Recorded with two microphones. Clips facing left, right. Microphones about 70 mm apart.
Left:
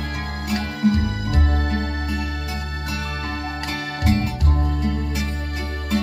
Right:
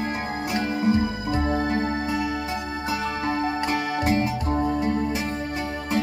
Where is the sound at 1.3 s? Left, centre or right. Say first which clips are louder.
Right 3 dB; centre.